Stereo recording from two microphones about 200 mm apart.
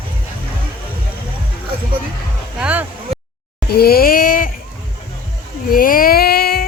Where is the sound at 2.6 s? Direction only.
5° right (ahead or behind).